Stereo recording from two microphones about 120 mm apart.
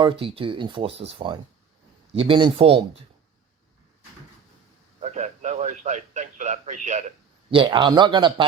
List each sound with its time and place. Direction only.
0.0 s speech: 45° right (ahead or behind)
4.9 s a sound: 75° right (ahead or behind); by 7.0 s 90° right
7.5 s speech: 45° right (ahead or behind)